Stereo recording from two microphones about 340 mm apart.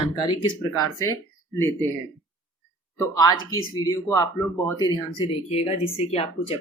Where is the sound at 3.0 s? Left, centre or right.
Centre.